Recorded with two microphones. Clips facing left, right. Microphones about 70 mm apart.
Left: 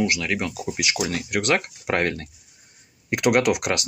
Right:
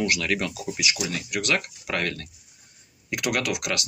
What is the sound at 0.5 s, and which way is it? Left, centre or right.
Speech, left.